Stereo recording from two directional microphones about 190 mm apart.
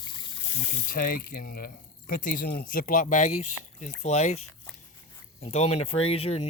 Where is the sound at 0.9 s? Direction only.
50° left (ahead or behind).